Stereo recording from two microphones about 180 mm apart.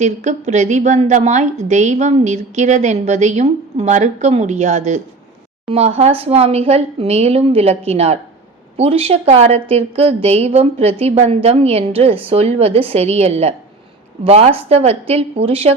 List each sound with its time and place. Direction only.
0.0 s a woman's voice: 40° right (ahead or behind)